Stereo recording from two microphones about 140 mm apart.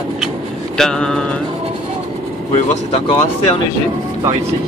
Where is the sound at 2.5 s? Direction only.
55° left (ahead or behind).